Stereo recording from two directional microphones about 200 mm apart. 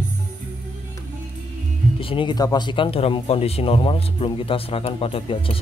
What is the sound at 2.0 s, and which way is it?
Speech, 25° left (ahead or behind).